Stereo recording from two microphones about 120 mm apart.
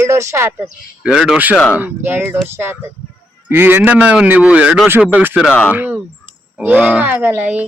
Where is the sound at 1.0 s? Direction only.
5° right (ahead or behind).